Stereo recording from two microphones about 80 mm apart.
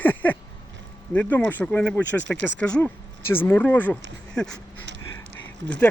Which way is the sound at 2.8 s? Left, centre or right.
Left.